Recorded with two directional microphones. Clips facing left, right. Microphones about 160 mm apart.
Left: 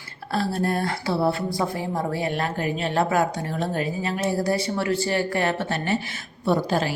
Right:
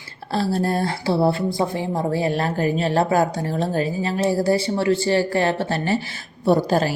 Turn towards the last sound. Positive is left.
turn(degrees=-40)  # may be behind; listen again after turning